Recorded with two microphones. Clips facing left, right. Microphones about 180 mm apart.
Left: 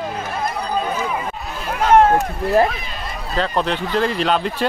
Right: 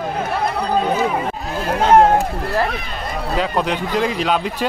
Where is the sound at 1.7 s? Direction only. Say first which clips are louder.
Right 1 dB; 30° right (ahead or behind).